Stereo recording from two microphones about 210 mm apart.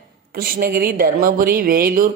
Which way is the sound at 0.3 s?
45° right (ahead or behind).